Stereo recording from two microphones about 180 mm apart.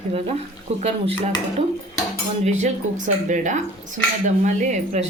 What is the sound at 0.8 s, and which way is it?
Speech, 35° right (ahead or behind).